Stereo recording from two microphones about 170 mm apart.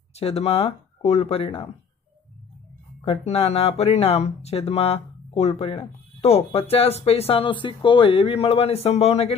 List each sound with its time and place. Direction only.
0.1 s speech: 35° left (ahead or behind)
3.1 s speech: 35° left (ahead or behind)